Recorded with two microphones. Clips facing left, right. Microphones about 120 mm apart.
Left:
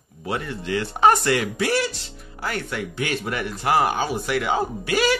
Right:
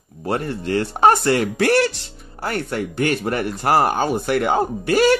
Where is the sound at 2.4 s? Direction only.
45° right (ahead or behind).